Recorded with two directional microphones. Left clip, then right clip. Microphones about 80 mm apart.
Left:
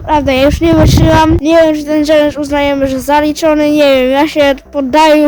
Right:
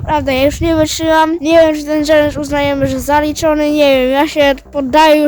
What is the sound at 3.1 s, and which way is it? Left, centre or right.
Speech, right.